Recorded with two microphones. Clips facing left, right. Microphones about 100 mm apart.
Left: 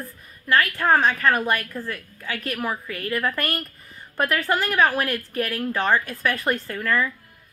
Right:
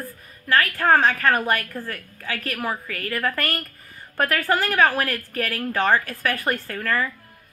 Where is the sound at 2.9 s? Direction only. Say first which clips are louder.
Left 1 dB; 10° left (ahead or behind).